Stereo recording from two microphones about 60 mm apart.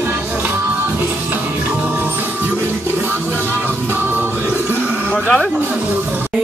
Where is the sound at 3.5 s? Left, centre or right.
Right.